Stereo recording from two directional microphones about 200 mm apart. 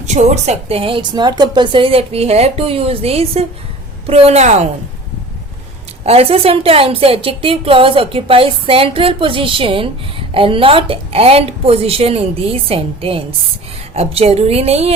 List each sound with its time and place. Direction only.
0.0 s a woman's voice: 35° right (ahead or behind)
6.1 s a woman's voice: 30° right (ahead or behind)